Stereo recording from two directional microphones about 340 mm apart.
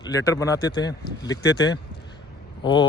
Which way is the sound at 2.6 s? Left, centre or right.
Centre.